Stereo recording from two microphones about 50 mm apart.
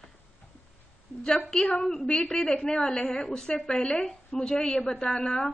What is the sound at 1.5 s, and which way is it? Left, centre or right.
A woman's voice, centre.